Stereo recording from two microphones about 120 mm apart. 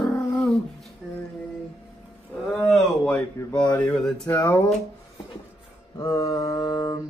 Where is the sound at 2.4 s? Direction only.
Centre (ahead or behind).